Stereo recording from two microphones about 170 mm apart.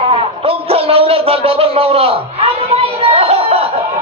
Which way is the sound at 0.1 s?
35° right (ahead or behind).